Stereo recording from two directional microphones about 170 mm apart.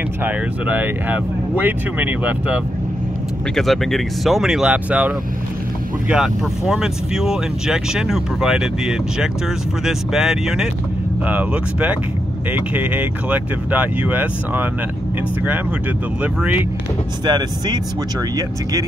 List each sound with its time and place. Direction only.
0.2 s speech: 10° right (ahead or behind)
3.5 s speech: centre (ahead or behind)
16.2 s speech: 10° right (ahead or behind)
17.2 s speech: 25° right (ahead or behind)